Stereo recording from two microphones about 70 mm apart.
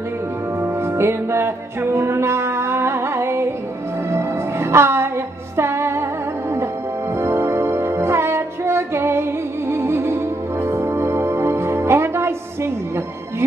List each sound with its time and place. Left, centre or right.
0.6 s music: right
7.2 s music: right